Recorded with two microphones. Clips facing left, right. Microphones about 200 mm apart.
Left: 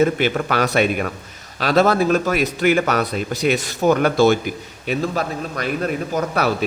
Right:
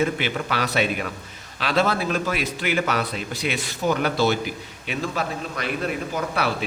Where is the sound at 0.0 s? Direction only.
45° left (ahead or behind).